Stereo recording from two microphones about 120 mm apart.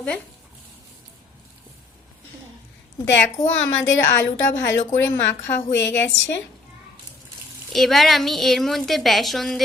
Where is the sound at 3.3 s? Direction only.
25° left (ahead or behind).